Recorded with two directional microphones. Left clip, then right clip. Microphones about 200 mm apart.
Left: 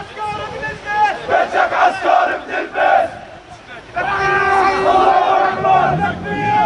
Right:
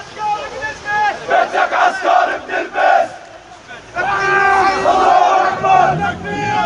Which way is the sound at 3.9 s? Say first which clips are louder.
Right 1 dB; 50° right (ahead or behind).